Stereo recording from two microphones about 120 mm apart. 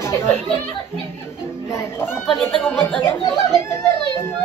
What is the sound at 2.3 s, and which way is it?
Speech, centre (ahead or behind).